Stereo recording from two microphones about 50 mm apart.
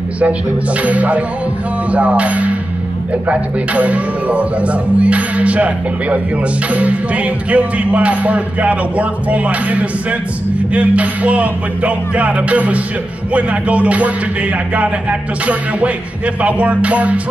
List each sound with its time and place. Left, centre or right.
0.8 s speech: right